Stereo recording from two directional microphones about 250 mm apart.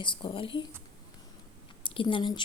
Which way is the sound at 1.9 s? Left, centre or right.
Centre.